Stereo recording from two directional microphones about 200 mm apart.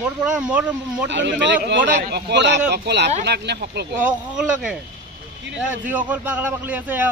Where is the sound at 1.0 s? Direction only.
60° right (ahead or behind).